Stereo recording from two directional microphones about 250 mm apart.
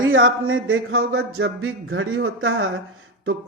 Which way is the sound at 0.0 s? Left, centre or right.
Right.